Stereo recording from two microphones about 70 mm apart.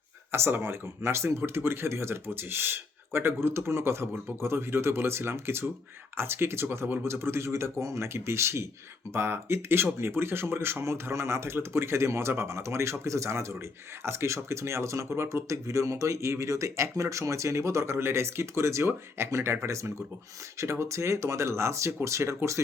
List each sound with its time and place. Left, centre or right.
0.3 s speech: right